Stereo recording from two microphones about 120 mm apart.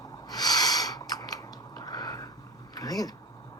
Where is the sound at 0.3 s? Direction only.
30° left (ahead or behind).